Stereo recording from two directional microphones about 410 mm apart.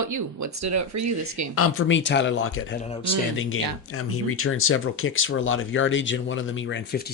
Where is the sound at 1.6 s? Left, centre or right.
Left.